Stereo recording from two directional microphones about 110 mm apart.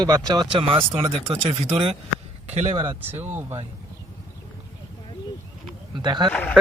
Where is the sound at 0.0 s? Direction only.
40° right (ahead or behind).